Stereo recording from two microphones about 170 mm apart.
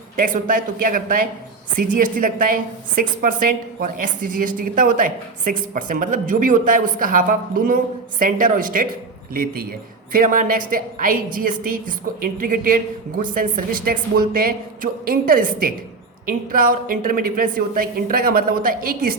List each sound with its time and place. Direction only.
0.2 s a woman's voice: 55° right (ahead or behind)